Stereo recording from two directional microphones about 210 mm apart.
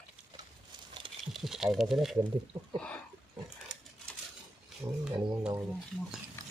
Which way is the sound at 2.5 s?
25° right (ahead or behind).